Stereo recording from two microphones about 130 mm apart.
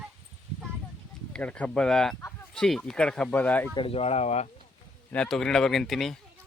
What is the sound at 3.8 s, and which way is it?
Speech, 45° left (ahead or behind).